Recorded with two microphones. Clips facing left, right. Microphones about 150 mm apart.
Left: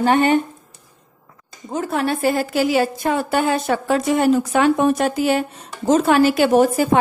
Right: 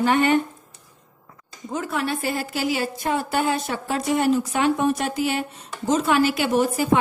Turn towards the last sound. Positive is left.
turn(degrees=45)  # may be behind; listen again after turning